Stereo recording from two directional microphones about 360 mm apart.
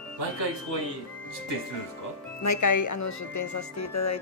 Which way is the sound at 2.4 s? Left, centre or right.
Left.